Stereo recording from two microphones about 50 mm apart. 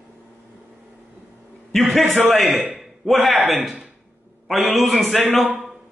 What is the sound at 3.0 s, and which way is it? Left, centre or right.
Speech, centre.